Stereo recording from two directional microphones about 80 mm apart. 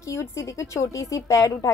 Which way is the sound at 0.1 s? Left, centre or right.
Left.